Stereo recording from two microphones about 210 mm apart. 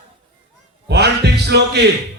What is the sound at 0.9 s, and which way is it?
Speech, 50° right (ahead or behind).